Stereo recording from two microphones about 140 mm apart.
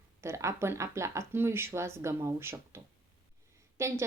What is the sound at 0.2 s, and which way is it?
A woman's voice, 20° right (ahead or behind).